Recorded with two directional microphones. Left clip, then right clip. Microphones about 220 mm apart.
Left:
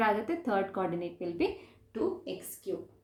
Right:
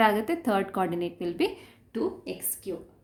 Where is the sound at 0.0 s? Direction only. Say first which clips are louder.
Right 5 dB; 50° right (ahead or behind).